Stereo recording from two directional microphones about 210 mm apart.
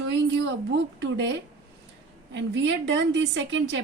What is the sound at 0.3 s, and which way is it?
A woman's voice, 55° right (ahead or behind).